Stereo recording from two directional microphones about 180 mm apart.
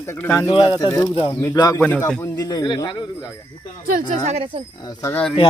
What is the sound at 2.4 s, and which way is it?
Speech, 20° left (ahead or behind).